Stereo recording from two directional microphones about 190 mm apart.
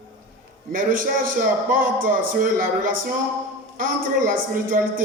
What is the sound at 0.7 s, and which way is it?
A man's voice, 45° right (ahead or behind).